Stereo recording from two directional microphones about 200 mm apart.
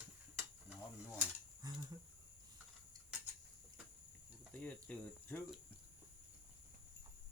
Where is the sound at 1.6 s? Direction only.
20° right (ahead or behind).